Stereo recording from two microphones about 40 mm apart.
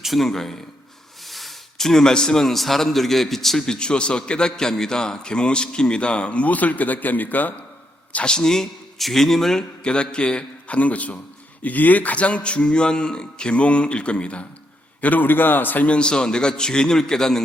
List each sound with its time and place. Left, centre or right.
0.0 s speech: centre
0.3 s a man's voice: centre
3.7 s a man's voice: left
8.2 s speech: centre
9.8 s a man's voice: left
15.0 s a man's voice: left
15.9 s a man's voice: left